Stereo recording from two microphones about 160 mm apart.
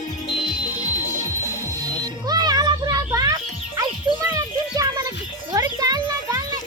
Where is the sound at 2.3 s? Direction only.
25° right (ahead or behind).